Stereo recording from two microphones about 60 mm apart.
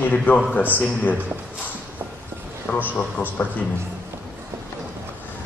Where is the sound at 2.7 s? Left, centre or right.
Left.